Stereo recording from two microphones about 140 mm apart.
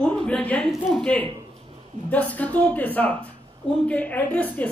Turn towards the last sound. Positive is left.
turn(degrees=10)  # may be behind; listen again after turning